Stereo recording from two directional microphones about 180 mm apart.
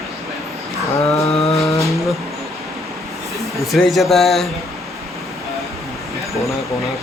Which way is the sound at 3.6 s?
Centre (ahead or behind).